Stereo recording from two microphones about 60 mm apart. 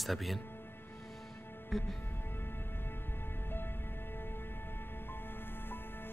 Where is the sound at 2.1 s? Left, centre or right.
Left.